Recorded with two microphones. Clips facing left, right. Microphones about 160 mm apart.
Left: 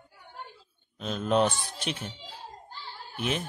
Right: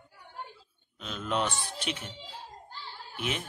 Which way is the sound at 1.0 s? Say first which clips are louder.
Left 6 dB; 40° left (ahead or behind).